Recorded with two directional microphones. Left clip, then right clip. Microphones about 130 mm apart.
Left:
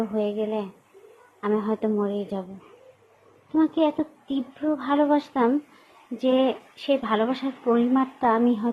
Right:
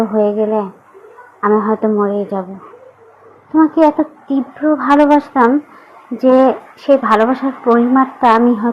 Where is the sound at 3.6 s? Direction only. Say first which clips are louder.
Right 12 dB; 35° left (ahead or behind).